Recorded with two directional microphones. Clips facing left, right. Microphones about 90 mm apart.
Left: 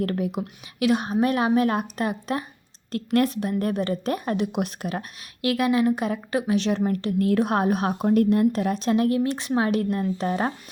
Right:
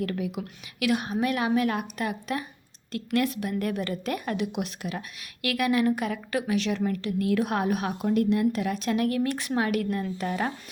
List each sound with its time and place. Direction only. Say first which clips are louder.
0.0 s a woman's voice: left 4 dB; 40° left (ahead or behind)
5.4 s a woman's voice: left 3 dB; 25° left (ahead or behind)